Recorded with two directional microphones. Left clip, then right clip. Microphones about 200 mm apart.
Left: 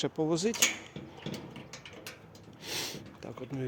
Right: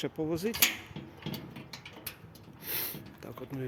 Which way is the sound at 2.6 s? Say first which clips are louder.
Left 3 dB; 15° left (ahead or behind).